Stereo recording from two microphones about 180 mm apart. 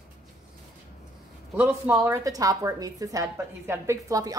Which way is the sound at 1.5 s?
10° right (ahead or behind).